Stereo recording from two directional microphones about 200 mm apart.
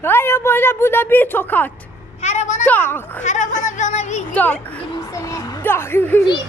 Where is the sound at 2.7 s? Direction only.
10° left (ahead or behind).